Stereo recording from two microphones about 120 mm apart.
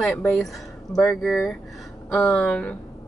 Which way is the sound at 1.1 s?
5° left (ahead or behind).